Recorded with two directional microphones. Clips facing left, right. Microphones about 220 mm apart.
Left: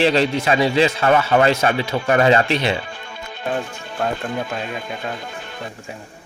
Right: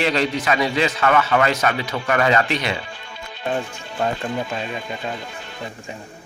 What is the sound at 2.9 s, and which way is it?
Music, 50° left (ahead or behind).